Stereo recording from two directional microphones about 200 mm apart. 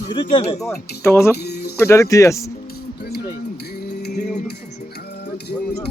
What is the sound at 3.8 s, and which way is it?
Music, 55° left (ahead or behind).